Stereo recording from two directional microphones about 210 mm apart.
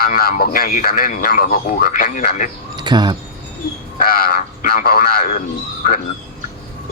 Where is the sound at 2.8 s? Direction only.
20° right (ahead or behind).